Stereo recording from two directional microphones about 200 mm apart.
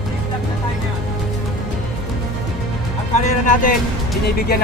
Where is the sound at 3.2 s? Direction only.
40° left (ahead or behind).